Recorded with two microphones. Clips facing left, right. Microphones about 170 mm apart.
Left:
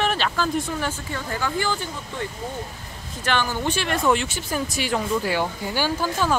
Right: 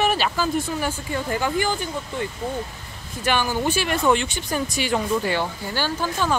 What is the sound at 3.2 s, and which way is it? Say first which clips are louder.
Speech: right 2 dB; 10° right (ahead or behind).